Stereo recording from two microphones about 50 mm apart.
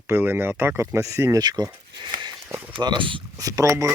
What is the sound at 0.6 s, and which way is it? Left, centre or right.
Speech, right.